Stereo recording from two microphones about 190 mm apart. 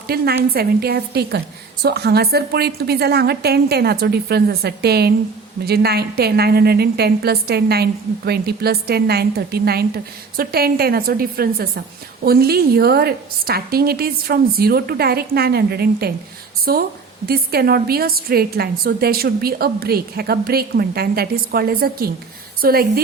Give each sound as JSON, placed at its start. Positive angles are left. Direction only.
{"t": 0.1, "sound": "a woman's voice", "side_deg": -55}